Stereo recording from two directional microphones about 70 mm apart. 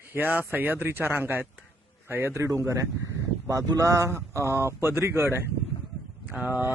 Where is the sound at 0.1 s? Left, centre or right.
Right.